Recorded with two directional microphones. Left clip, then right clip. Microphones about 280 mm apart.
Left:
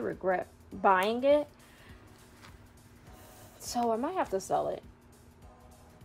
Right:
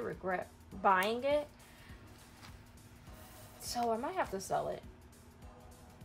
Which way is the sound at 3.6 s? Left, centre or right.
Centre.